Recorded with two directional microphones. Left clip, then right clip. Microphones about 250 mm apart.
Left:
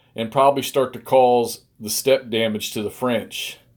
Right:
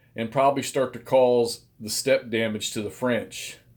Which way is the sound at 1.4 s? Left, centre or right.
Left.